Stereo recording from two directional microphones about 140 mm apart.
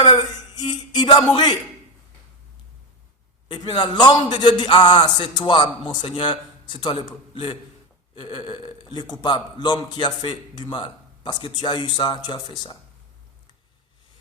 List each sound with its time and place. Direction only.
0.1 s speech: 30° left (ahead or behind)
3.5 s a man's voice: 30° left (ahead or behind)